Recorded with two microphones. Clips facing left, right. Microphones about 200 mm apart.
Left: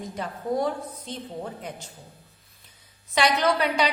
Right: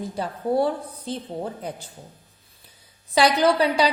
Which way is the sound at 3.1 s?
35° right (ahead or behind).